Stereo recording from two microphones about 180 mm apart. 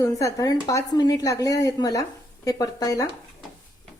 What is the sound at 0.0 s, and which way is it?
Speech, 20° left (ahead or behind).